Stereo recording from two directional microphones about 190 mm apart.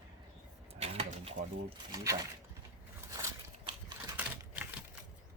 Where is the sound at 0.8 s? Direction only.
30° right (ahead or behind).